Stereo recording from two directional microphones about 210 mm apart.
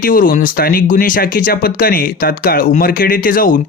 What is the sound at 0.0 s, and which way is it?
Speech, 40° left (ahead or behind).